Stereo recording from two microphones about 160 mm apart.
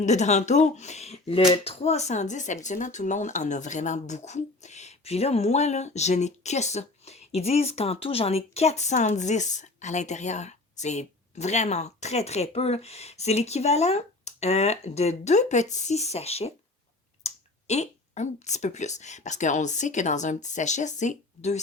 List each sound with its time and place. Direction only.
0.0 s speech: 45° left (ahead or behind)